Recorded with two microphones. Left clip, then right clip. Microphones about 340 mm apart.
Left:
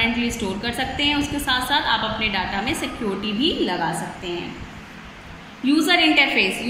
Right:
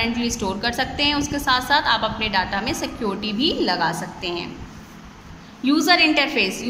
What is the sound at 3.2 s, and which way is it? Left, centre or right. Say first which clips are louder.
Speech: even; right.